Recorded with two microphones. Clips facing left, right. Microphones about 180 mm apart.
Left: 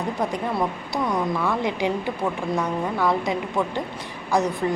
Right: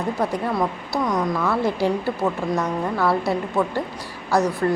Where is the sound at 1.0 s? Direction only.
5° left (ahead or behind).